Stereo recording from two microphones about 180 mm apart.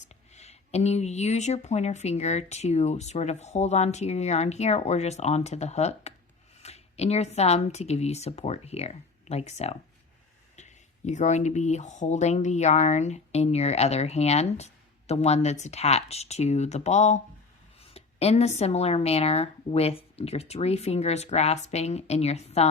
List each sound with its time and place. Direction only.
0.3 s speech: 35° left (ahead or behind)